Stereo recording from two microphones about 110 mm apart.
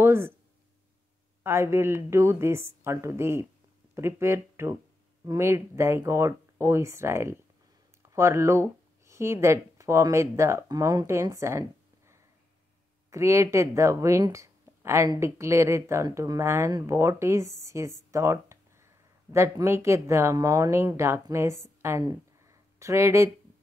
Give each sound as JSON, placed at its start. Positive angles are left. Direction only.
{"t": 0.0, "sound": "speech", "side_deg": -25}
{"t": 1.4, "sound": "speech", "side_deg": -25}
{"t": 13.1, "sound": "speech", "side_deg": -25}
{"t": 18.1, "sound": "a sound", "side_deg": -30}
{"t": 19.3, "sound": "speech", "side_deg": -25}
{"t": 22.5, "sound": "a sound", "side_deg": -25}